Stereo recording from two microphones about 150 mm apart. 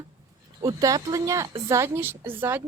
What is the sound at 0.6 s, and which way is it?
A woman's voice, 25° right (ahead or behind).